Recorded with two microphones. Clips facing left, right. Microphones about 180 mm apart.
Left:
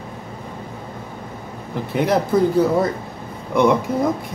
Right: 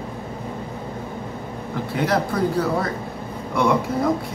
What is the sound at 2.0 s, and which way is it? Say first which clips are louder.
Speech: left 4 dB; 20° left (ahead or behind).